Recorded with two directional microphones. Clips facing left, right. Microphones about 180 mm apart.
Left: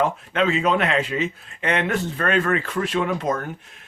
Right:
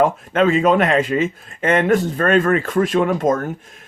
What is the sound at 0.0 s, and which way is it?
A man's voice, 50° right (ahead or behind).